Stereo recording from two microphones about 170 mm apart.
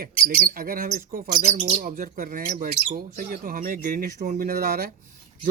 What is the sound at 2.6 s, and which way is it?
Speech, 55° right (ahead or behind).